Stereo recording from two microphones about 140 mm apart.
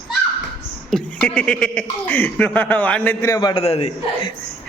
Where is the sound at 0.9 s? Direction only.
5° left (ahead or behind); by 3.6 s 30° left (ahead or behind).